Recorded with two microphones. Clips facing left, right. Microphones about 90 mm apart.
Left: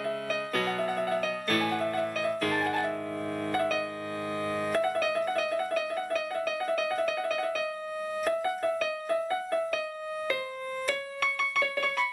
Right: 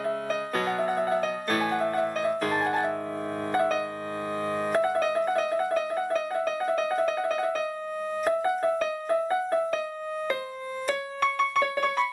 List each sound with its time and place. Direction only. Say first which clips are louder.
0.0 s music: right 3 dB; 25° right (ahead or behind)
3.5 s piano: right 4 dB; 25° right (ahead or behind)
4.6 s music: right 3 dB; 30° right (ahead or behind)
10.9 s music: right 7 dB; 25° right (ahead or behind)